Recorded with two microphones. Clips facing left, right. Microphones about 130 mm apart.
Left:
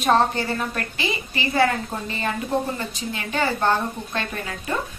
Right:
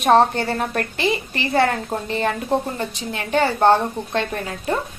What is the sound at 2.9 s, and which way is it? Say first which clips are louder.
Speech: right 6 dB; 60° right (ahead or behind).